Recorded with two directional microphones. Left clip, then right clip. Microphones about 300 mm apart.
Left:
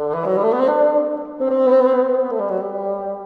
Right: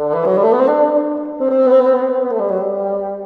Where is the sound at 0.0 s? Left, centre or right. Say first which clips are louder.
Right 4 dB; centre.